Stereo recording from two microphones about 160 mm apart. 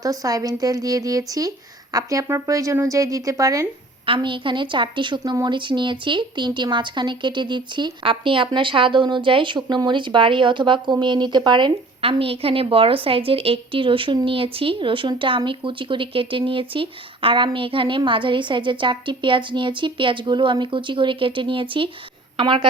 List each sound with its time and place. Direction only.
0.0 s a woman's voice: 20° right (ahead or behind)
4.0 s a woman's voice: 30° right (ahead or behind)